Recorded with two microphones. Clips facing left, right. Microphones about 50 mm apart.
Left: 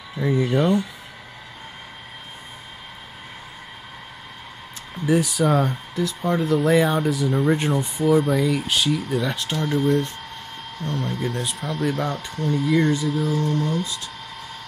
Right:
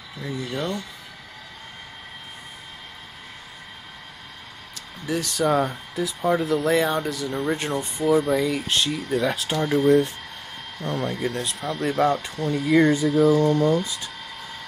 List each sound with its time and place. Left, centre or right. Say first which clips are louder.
0.2 s speech: left 9 dB; left
5.0 s speech: left 7 dB; centre
5.3 s speech: left 1 dB; centre
11.3 s speech: left 1 dB; centre
12.7 s speech: right 5 dB; right